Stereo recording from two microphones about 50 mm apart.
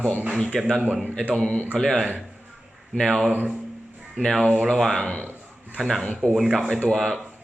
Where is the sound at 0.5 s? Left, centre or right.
Centre.